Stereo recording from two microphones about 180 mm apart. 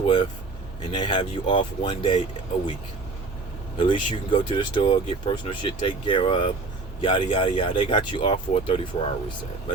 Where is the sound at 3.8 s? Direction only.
25° left (ahead or behind).